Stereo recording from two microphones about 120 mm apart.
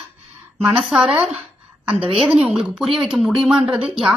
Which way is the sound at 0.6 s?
5° right (ahead or behind).